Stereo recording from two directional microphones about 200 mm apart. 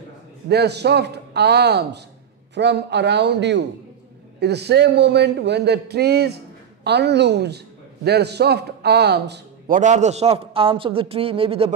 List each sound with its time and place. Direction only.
0.5 s a man's voice: 55° right (ahead or behind)
9.8 s a man's voice: 35° right (ahead or behind)